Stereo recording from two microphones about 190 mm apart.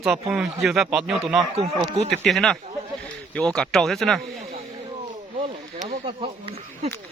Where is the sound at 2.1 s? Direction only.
Centre (ahead or behind).